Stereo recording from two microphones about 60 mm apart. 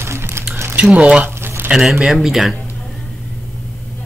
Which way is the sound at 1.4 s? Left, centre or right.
Right.